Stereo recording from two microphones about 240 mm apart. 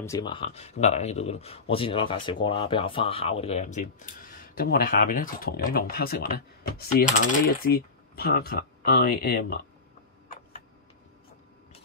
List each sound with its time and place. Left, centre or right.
0.0 s speech: centre; by 9.6 s left